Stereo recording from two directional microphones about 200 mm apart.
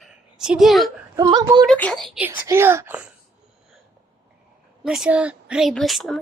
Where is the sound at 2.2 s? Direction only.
10° right (ahead or behind).